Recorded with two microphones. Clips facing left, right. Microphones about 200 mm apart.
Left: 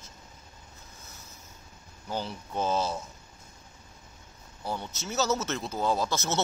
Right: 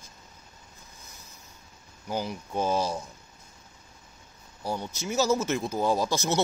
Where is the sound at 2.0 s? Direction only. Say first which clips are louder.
Right 3 dB; 10° right (ahead or behind).